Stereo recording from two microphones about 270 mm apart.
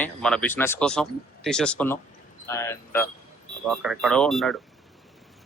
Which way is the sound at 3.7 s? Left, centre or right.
Centre.